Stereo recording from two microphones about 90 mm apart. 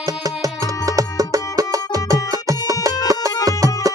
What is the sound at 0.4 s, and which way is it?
Music, 40° right (ahead or behind).